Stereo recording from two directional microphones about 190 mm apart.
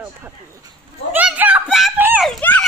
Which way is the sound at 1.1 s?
10° right (ahead or behind).